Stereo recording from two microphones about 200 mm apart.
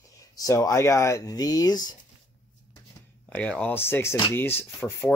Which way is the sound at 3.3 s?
5° left (ahead or behind).